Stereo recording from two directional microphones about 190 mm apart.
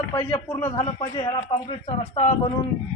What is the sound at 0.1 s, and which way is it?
Speech, 10° left (ahead or behind).